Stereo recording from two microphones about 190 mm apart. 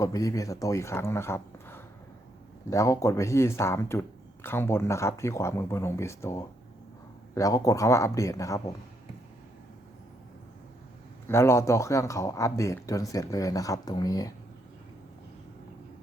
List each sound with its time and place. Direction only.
0.0 s speech: 15° left (ahead or behind)
11.3 s speech: 15° left (ahead or behind)